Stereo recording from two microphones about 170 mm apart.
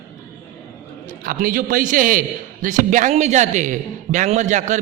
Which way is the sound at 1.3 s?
55° right (ahead or behind).